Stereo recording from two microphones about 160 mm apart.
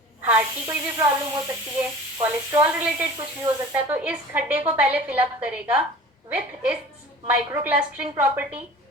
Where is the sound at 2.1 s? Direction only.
25° right (ahead or behind); by 5.8 s 10° right (ahead or behind).